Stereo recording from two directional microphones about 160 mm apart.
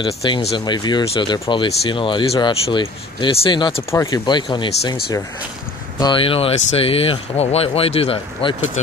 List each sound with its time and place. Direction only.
0.0 s speech: 35° left (ahead or behind)
5.9 s speech: 30° left (ahead or behind)